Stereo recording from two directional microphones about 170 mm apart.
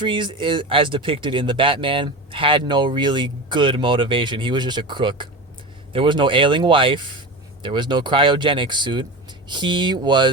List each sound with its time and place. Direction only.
0.0 s speech: 25° right (ahead or behind)